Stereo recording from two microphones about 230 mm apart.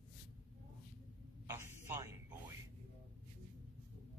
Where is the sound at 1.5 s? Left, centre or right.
Centre.